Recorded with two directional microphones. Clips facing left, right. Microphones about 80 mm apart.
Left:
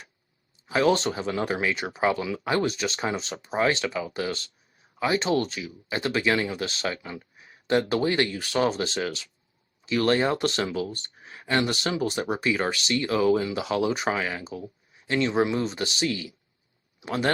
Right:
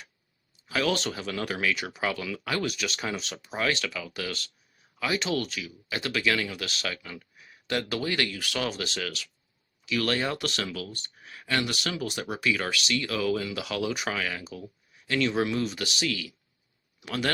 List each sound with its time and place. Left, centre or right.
0.7 s speech: left